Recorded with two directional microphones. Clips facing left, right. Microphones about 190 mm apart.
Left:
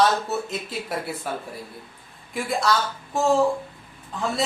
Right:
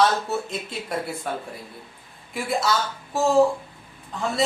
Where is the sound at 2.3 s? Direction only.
Centre (ahead or behind).